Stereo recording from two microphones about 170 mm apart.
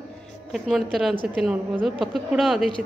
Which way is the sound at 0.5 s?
Centre (ahead or behind).